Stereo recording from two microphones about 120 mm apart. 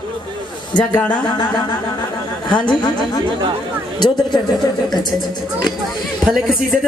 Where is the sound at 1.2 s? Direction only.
35° left (ahead or behind).